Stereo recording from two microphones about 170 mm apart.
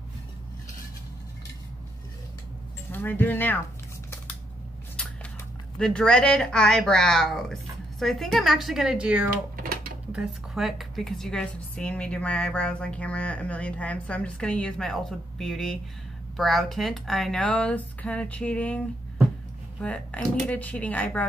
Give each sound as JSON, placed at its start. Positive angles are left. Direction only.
{"t": 2.9, "sound": "speech", "side_deg": 10}
{"t": 5.8, "sound": "speech", "side_deg": 5}
{"t": 9.6, "sound": "a sound", "side_deg": -60}
{"t": 10.1, "sound": "a woman's voice", "side_deg": 0}